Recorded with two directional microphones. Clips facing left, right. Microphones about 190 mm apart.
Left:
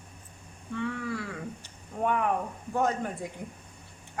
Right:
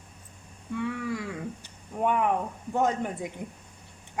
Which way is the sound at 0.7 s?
10° right (ahead or behind).